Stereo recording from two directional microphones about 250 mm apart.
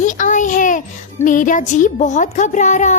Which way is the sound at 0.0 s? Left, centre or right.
Left.